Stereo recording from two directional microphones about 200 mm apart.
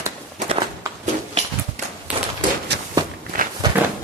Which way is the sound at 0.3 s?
30° right (ahead or behind).